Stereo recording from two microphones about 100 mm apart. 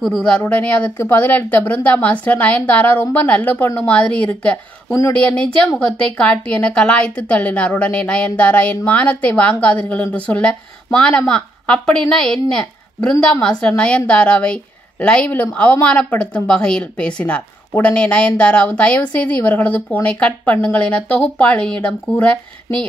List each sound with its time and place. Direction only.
0.0 s a woman's voice: 5° left (ahead or behind)
4.8 s speech: 35° left (ahead or behind)
5.8 s a woman's voice: 10° left (ahead or behind)